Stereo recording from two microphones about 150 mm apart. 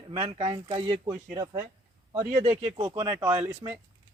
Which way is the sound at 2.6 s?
40° right (ahead or behind).